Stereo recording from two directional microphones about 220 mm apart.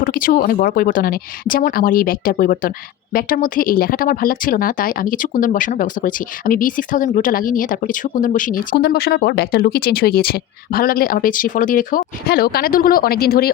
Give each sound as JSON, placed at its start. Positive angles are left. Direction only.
{"t": 0.0, "sound": "speech", "side_deg": 40}